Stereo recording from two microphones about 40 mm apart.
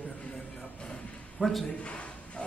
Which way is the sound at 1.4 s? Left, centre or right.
Centre.